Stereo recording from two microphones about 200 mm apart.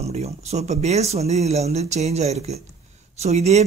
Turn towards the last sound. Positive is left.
turn(degrees=-35)  # may be behind; listen again after turning